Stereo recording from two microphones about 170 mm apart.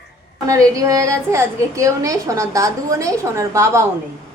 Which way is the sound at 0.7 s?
20° right (ahead or behind).